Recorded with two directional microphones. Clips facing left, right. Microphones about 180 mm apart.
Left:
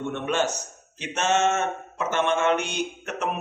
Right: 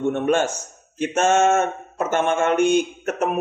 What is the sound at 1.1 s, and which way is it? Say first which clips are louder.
Mantra: right 5 dB; 50° right (ahead or behind).